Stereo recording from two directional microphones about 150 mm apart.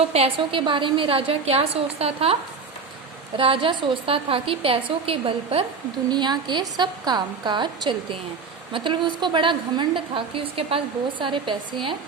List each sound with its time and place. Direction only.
0.1 s a woman's voice: 40° right (ahead or behind)
6.1 s a woman's voice: 30° right (ahead or behind)